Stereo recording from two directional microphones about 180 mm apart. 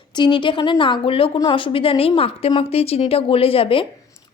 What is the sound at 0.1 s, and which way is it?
A woman's voice, 25° left (ahead or behind).